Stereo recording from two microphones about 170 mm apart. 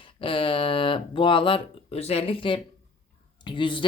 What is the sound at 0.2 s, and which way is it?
Speech, 30° left (ahead or behind).